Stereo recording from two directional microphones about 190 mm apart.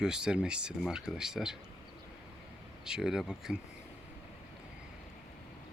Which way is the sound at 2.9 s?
5° right (ahead or behind).